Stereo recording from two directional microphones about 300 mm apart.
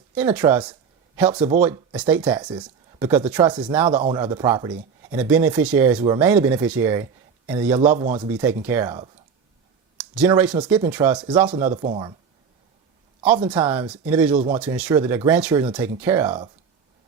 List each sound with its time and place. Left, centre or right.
0.1 s speech: centre
1.9 s speech: centre
8.0 s speech: right
8.3 s speech: centre
13.4 s speech: centre